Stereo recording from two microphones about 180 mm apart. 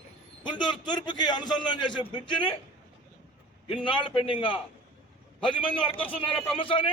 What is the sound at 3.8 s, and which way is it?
A man's voice, 25° left (ahead or behind).